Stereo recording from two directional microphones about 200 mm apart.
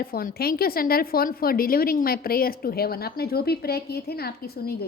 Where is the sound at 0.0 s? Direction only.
45° left (ahead or behind).